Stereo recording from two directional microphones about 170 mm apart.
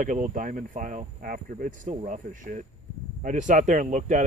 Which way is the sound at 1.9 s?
40° right (ahead or behind).